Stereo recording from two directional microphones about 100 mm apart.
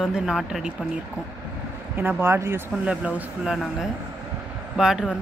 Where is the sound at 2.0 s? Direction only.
20° right (ahead or behind).